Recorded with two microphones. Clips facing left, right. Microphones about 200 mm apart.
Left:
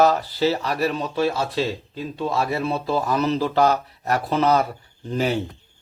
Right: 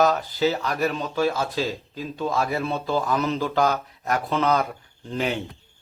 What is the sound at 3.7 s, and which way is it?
Speech, 35° left (ahead or behind).